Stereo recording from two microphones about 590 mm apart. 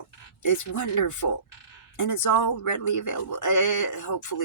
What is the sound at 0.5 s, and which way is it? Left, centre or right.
Speech, left.